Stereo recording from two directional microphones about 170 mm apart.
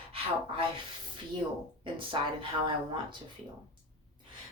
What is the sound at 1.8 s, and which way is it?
Speech, 30° right (ahead or behind).